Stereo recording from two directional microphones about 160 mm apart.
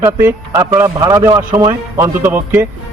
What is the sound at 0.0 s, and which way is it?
A man's voice, 15° right (ahead or behind).